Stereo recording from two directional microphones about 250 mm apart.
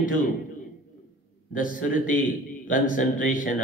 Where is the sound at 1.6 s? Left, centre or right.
Left.